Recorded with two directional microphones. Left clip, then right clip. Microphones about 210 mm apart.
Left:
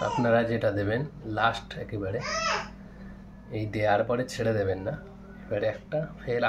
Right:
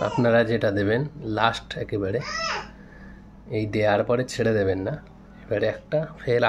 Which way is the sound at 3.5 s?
45° right (ahead or behind).